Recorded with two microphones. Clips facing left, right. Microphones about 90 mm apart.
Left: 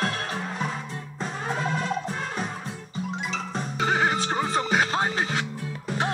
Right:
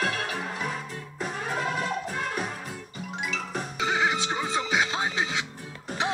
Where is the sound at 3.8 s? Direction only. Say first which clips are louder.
Left 2 dB; 45° left (ahead or behind).